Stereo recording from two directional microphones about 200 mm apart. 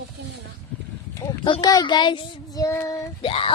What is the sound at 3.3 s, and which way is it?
Child singing, 30° left (ahead or behind).